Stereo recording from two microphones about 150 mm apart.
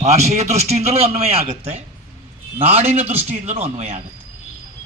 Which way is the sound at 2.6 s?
40° right (ahead or behind).